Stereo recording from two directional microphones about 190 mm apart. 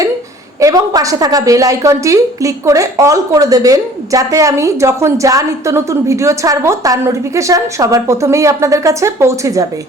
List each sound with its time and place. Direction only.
0.6 s a woman's voice: 20° right (ahead or behind)